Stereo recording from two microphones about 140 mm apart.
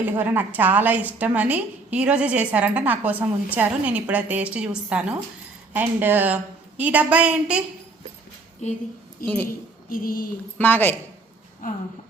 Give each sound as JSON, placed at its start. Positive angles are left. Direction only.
{"t": 0.0, "sound": "a woman's voice", "side_deg": -15}
{"t": 8.6, "sound": "a woman's voice", "side_deg": 55}
{"t": 9.2, "sound": "a woman's voice", "side_deg": 10}
{"t": 9.9, "sound": "a sound", "side_deg": 90}
{"t": 10.6, "sound": "a woman's voice", "side_deg": 15}